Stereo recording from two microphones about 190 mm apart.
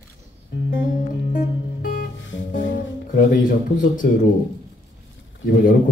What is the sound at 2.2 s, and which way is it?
Music, 80° left.